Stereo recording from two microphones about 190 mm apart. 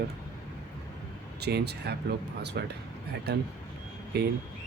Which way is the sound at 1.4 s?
60° right (ahead or behind).